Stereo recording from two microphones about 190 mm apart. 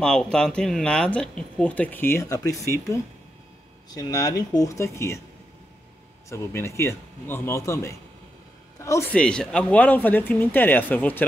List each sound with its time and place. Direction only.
0.0 s speech: 5° left (ahead or behind)
3.9 s speech: 20° left (ahead or behind)
6.2 s speech: 15° left (ahead or behind)
9.1 s speech: 5° left (ahead or behind)